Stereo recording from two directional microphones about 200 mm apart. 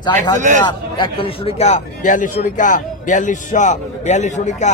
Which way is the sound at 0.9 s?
25° left (ahead or behind).